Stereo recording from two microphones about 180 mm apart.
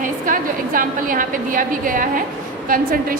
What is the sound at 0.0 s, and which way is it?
A woman's voice, 50° right (ahead or behind).